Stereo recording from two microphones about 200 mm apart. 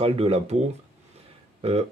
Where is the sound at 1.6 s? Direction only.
30° right (ahead or behind).